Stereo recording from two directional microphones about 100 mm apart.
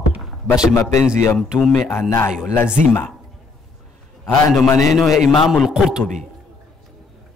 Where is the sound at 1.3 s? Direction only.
Centre (ahead or behind).